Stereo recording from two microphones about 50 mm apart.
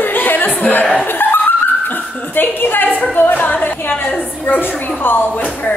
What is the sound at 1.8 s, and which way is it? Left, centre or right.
Dog, left.